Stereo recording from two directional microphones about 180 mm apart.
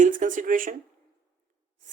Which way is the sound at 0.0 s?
45° right (ahead or behind).